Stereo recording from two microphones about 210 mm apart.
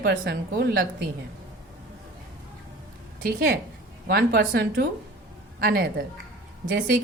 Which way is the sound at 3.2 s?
45° right (ahead or behind).